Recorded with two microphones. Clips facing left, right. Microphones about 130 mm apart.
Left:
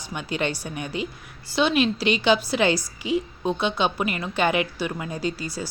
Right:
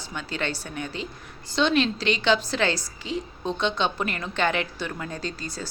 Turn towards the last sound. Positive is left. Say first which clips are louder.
# left 5 dB
turn(degrees=10)  # may be behind; listen again after turning